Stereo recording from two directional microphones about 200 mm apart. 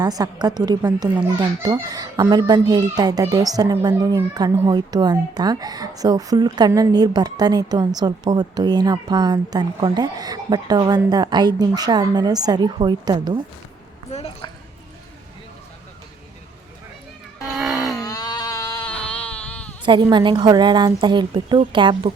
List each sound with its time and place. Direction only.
0.0 s a child's voice: 20° right (ahead or behind)
14.1 s a woman's voice: 30° left (ahead or behind)
17.4 s wail: centre (ahead or behind)
18.0 s a sound: 20° left (ahead or behind)
18.8 s a sound: 5° left (ahead or behind)
19.8 s a child's voice: 25° right (ahead or behind)